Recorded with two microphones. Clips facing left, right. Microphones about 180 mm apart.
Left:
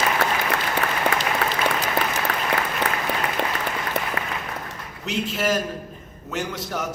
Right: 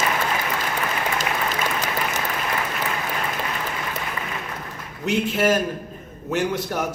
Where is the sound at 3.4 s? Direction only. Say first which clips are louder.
Left 3 dB; 65° left (ahead or behind).